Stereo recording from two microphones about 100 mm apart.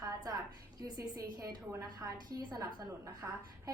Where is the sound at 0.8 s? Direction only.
40° right (ahead or behind).